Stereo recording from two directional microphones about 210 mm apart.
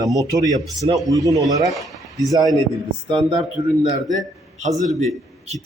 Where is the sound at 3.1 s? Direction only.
20° right (ahead or behind).